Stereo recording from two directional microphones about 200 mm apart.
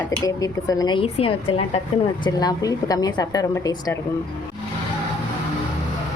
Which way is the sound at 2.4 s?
20° left (ahead or behind).